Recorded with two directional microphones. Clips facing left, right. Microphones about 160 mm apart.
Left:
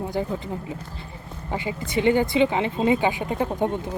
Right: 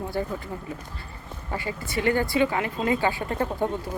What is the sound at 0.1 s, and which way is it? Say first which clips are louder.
Speech: left 2 dB; 15° left (ahead or behind).